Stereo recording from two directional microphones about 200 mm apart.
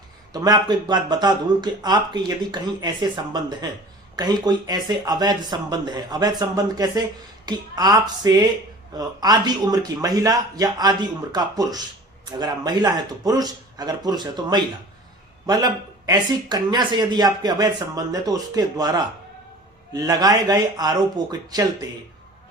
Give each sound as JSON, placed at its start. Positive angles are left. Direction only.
{"t": 0.3, "sound": "speech", "side_deg": -20}